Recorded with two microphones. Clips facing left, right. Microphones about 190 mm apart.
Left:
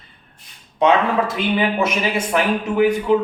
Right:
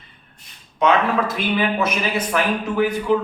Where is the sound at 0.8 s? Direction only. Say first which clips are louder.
Left 2 dB; 20° left (ahead or behind).